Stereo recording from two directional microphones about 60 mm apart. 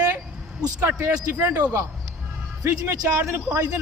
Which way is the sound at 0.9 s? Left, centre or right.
Right.